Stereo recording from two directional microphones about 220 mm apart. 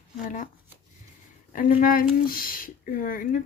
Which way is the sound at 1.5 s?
35° left (ahead or behind).